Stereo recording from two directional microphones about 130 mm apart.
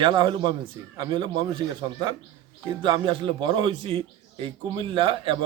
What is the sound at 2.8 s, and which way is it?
A man's voice, 40° right (ahead or behind).